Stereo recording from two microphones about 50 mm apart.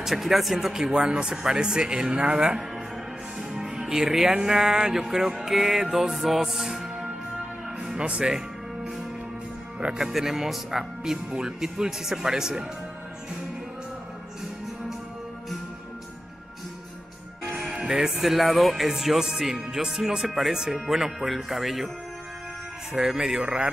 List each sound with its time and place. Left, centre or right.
0.0 s music: centre
3.3 s speech: centre
9.8 s music: centre
17.6 s music: centre
20.8 s speech: centre
22.9 s music: centre